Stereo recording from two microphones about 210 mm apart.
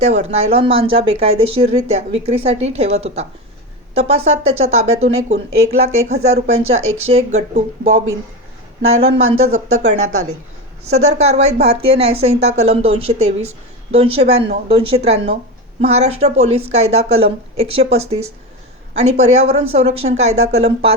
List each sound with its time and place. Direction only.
0.0 s speech: 30° right (ahead or behind)
9.0 s speech: 30° right (ahead or behind)
9.2 s speech: 90° right
9.8 s speech: 35° right (ahead or behind)